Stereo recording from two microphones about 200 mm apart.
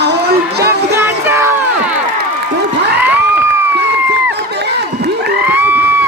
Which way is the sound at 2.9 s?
10° right (ahead or behind).